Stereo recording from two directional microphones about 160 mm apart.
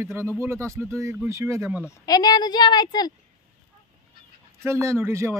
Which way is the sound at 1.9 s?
25° left (ahead or behind).